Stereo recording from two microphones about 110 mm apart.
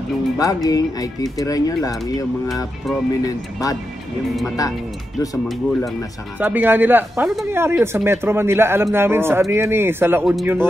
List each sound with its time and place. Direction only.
0.4 s speech: 35° left (ahead or behind)
6.4 s speech: 15° right (ahead or behind)